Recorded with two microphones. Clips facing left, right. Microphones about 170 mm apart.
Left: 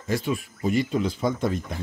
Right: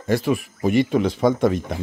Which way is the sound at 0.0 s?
70° right (ahead or behind).